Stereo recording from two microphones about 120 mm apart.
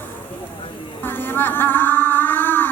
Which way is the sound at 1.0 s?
15° left (ahead or behind).